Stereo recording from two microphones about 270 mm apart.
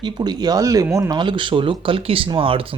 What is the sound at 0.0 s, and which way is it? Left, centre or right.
Speech, centre.